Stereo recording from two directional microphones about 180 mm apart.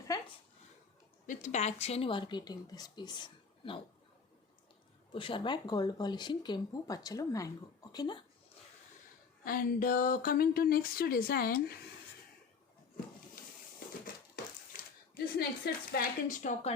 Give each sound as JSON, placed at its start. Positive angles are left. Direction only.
{"t": 0.1, "sound": "a sound", "side_deg": 20}
{"t": 1.3, "sound": "a woman's voice", "side_deg": 45}
{"t": 5.1, "sound": "a woman's voice", "side_deg": 30}
{"t": 9.4, "sound": "speech", "side_deg": 55}
{"t": 15.1, "sound": "speech", "side_deg": 60}